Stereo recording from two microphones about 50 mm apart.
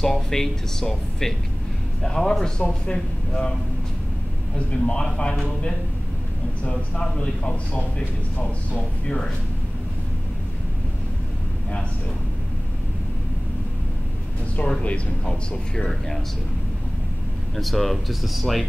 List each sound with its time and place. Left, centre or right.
0.0 s speech: centre
4.7 s speech: centre
6.6 s speech: left
14.7 s speech: left
15.7 s speech: centre
17.6 s speech: centre